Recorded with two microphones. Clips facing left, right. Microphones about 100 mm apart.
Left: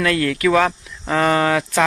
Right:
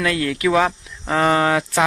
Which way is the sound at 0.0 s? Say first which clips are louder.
Left 2 dB; 10° right (ahead or behind).